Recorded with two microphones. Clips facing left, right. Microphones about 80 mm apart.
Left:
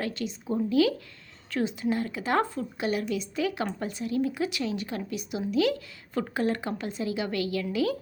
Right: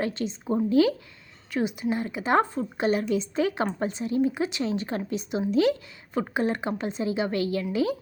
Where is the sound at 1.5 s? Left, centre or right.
Centre.